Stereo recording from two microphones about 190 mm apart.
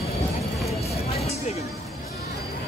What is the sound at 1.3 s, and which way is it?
Music, 35° left (ahead or behind).